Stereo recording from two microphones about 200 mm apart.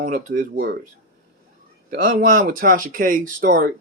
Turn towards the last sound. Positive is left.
turn(degrees=-45)  # may be behind; listen again after turning